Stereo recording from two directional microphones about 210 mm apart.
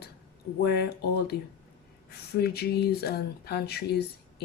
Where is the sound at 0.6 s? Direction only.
50° left (ahead or behind).